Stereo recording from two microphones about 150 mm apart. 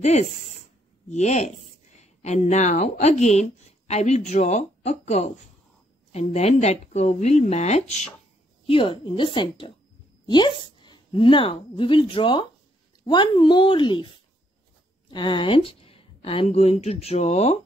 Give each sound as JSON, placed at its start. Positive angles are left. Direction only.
{"t": 1.1, "sound": "speech", "side_deg": 50}
{"t": 8.6, "sound": "a woman's voice", "side_deg": 35}